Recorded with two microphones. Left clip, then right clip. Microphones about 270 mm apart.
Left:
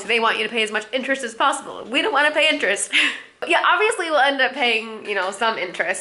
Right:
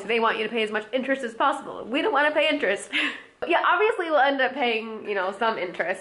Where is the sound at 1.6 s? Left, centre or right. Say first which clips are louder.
Left 2 dB; right.